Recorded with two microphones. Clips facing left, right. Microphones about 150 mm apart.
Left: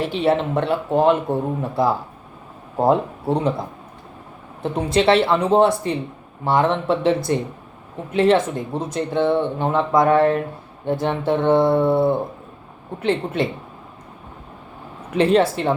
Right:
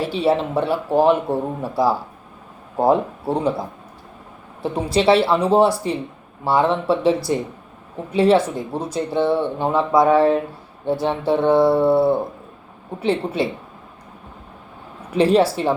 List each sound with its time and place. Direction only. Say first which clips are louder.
0.0 s speech: even; 5° right (ahead or behind)
4.9 s a woman's voice: right 1 dB; 5° right (ahead or behind)
15.1 s a woman's voice: right 1 dB; 10° right (ahead or behind)